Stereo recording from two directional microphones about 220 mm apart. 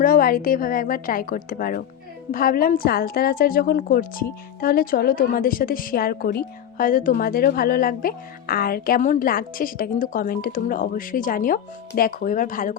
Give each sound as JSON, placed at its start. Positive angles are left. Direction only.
{"t": 0.0, "sound": "a woman's voice", "side_deg": 40}